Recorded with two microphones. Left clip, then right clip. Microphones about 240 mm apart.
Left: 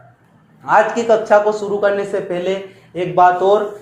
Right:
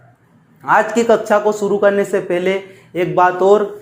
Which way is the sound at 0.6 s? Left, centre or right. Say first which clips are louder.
Even; right.